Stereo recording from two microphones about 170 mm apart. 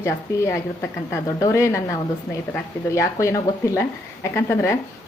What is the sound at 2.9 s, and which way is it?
A woman's voice, 20° left (ahead or behind).